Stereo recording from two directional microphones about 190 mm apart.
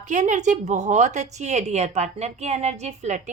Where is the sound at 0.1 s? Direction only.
40° right (ahead or behind).